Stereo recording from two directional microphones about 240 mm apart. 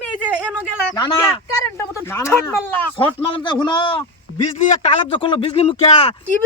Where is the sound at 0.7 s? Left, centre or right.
Centre.